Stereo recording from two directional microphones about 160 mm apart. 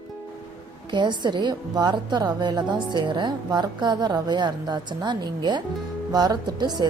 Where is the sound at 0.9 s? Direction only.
30° right (ahead or behind).